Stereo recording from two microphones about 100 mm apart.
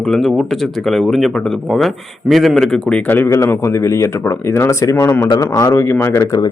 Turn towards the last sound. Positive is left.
turn(degrees=30)  # may be behind; listen again after turning